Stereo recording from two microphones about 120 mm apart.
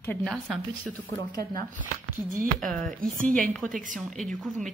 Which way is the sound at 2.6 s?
5° left (ahead or behind).